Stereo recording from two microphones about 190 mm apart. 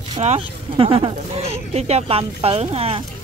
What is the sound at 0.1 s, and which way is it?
Speech, 35° right (ahead or behind).